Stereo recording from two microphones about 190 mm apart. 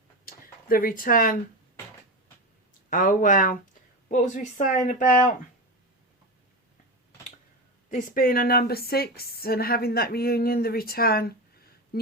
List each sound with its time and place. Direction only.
0.3 s a sound: 50° left (ahead or behind)
2.9 s a woman's voice: 45° left (ahead or behind)
7.9 s speech: 50° left (ahead or behind)